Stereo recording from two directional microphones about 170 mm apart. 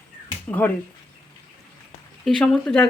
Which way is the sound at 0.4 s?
10° left (ahead or behind).